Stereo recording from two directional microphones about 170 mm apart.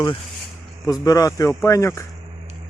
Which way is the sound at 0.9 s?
20° left (ahead or behind).